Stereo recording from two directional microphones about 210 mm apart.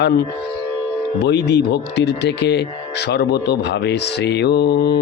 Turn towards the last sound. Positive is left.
turn(degrees=50)  # may be behind; listen again after turning